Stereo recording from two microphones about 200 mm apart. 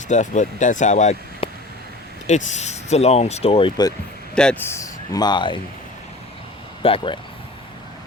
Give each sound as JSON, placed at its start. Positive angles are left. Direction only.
{"t": 0.1, "sound": "speech", "side_deg": 35}
{"t": 4.4, "sound": "speech", "side_deg": 5}
{"t": 6.8, "sound": "speech", "side_deg": 25}